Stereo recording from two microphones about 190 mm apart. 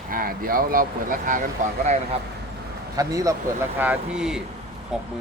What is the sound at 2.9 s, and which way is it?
Speech, 15° right (ahead or behind).